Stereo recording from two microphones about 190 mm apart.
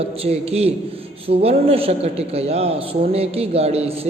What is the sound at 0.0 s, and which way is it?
A man's voice, 30° right (ahead or behind).